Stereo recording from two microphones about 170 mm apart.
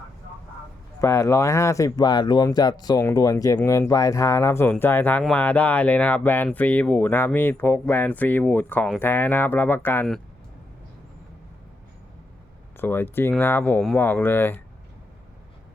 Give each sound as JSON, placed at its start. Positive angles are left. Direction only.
{"t": 1.0, "sound": "speech", "side_deg": 15}
{"t": 12.8, "sound": "speech", "side_deg": 10}